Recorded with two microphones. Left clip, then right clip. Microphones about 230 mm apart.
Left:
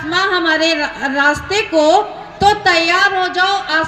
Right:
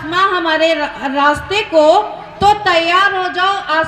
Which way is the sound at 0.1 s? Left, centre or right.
Left.